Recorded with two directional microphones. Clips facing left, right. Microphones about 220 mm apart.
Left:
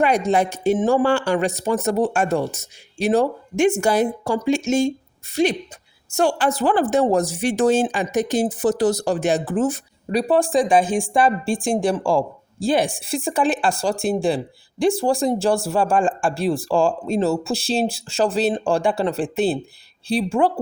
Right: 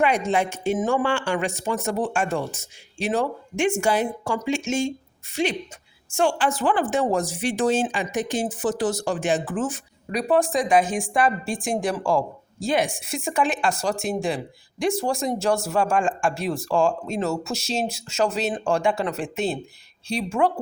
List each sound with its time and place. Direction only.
0.0 s a woman's voice: 40° left (ahead or behind)